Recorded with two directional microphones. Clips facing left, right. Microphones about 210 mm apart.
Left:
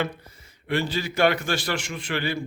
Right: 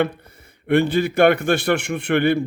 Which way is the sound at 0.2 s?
60° right (ahead or behind).